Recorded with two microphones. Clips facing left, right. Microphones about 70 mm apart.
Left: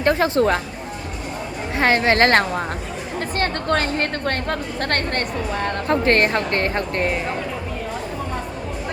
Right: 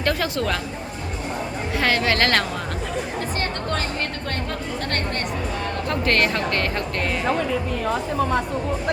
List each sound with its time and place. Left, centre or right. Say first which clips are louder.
0.0 s speech: left 6 dB; left
1.8 s speech: left 5 dB; left
3.3 s speech: left 8 dB; left
5.9 s speech: left 4 dB; left